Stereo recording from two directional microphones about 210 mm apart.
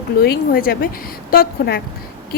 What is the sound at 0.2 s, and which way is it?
A woman's voice, 45° left (ahead or behind).